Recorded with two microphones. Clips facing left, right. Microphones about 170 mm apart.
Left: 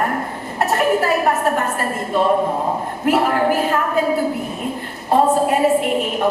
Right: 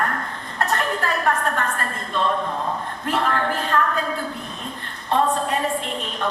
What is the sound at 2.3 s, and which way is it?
Speech, 40° left (ahead or behind).